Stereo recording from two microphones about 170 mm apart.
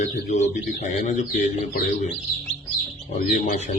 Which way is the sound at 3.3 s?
45° left (ahead or behind).